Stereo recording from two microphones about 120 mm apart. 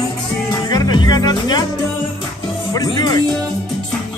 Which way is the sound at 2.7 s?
35° left (ahead or behind).